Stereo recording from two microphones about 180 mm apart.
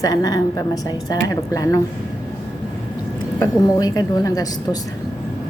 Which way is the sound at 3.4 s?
20° left (ahead or behind).